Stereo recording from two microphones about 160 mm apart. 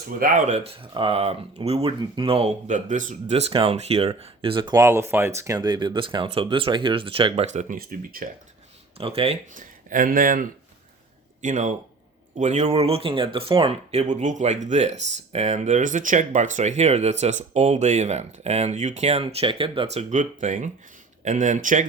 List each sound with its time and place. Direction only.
0.2 s speech: 60° right (ahead or behind); by 2.5 s 35° right (ahead or behind)
2.6 s speech: 50° right (ahead or behind); by 7.4 s 35° right (ahead or behind)
7.5 s speech: 50° right (ahead or behind)
9.0 s speech: 40° right (ahead or behind)
9.6 s speech: 60° right (ahead or behind)